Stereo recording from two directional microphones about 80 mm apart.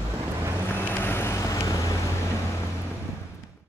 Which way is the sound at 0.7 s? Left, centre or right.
Left.